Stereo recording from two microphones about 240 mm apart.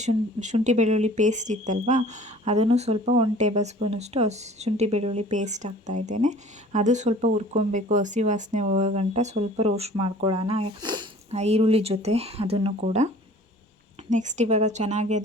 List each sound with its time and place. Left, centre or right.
0.0 s speech: right
14.1 s speech: right